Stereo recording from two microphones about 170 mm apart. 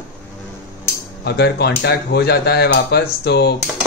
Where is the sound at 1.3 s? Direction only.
75° left (ahead or behind).